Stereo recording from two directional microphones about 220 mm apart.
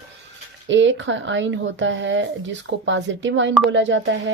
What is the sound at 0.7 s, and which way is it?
Speech, 55° right (ahead or behind).